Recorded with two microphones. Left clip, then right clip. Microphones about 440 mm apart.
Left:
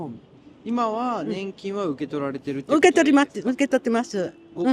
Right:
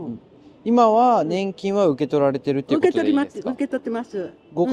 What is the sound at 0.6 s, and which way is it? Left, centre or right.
Speech, right.